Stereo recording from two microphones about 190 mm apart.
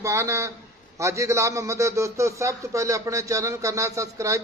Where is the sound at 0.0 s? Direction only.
15° right (ahead or behind).